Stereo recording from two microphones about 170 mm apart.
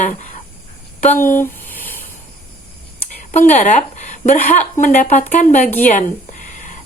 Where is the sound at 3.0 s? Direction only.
45° left (ahead or behind).